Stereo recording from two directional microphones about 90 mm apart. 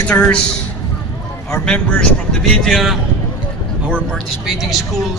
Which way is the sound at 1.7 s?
10° left (ahead or behind).